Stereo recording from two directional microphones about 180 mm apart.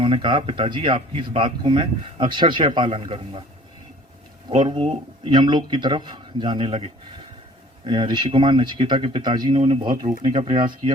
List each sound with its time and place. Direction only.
0.0 s speech: 30° right (ahead or behind)
4.4 s speech: 25° right (ahead or behind)